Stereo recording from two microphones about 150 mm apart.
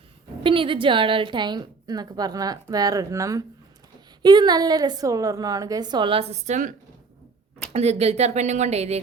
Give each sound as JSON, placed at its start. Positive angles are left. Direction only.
{"t": 0.4, "sound": "a woman's voice", "side_deg": -35}
{"t": 7.7, "sound": "speech", "side_deg": -45}